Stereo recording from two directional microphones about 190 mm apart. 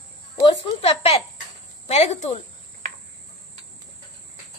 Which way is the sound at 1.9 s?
35° left (ahead or behind).